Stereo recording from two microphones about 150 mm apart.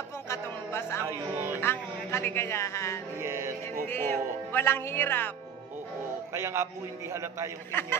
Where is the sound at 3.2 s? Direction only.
20° right (ahead or behind).